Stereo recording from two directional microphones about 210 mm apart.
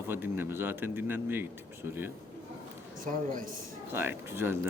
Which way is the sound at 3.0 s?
40° right (ahead or behind).